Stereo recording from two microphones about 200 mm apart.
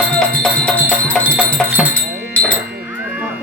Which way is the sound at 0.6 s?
5° left (ahead or behind).